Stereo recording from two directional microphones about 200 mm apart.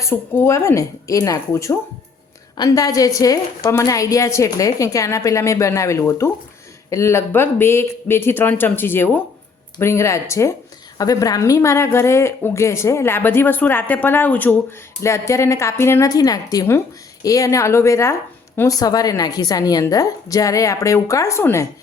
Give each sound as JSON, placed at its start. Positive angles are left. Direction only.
{"t": 0.0, "sound": "a woman's voice", "side_deg": 10}